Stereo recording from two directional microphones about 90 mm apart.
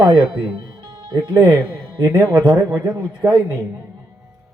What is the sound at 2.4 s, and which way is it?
Speech, 50° right (ahead or behind).